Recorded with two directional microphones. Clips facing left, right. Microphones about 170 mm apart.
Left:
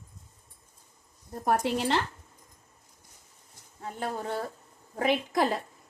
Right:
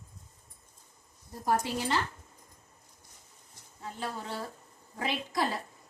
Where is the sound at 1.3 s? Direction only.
65° left (ahead or behind).